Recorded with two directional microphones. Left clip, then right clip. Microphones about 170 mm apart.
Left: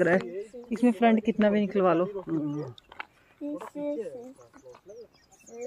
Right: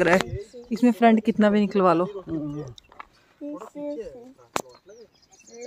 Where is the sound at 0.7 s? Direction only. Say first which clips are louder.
Right 5 dB; 45° right (ahead or behind).